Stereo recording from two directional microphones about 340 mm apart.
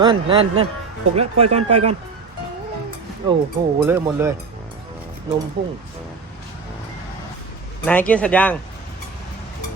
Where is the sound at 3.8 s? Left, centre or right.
Centre.